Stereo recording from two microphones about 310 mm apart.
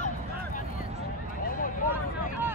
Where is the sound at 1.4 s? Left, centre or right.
Left.